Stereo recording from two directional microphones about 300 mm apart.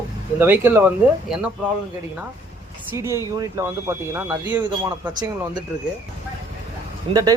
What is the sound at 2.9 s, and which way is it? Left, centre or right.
Speech, centre.